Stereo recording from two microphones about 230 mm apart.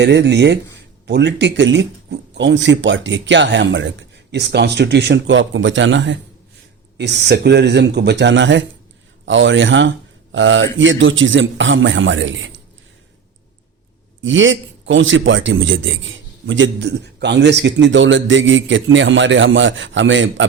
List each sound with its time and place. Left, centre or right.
0.0 s speech: right
14.2 s a man's voice: right